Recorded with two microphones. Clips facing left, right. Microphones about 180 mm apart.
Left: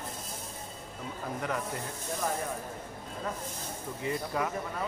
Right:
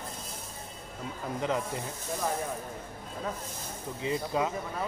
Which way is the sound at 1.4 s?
20° right (ahead or behind).